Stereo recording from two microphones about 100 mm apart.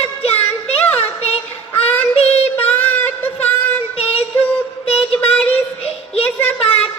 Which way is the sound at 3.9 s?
80° left.